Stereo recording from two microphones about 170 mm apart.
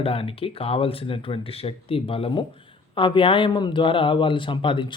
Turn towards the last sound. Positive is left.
turn(degrees=30)  # may be behind; listen again after turning